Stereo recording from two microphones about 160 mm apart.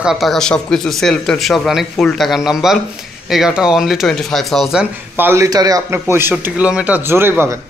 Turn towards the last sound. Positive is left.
turn(degrees=-15)  # may be behind; listen again after turning